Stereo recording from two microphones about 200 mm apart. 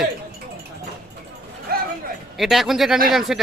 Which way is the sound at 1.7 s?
50° right (ahead or behind).